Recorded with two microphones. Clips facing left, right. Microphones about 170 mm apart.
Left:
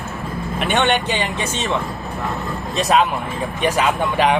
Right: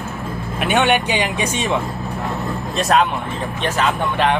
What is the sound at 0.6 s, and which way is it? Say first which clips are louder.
Speech: right 2 dB; 10° right (ahead or behind).